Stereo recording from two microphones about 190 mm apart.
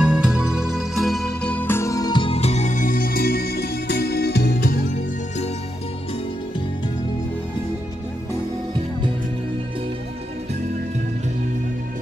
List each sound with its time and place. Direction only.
0.0 s music: 5° right (ahead or behind); by 4.7 s 50° left (ahead or behind)